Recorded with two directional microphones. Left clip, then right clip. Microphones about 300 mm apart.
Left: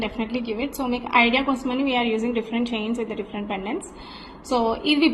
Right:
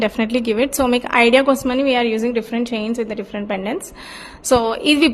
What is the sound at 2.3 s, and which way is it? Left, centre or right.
Speech, right.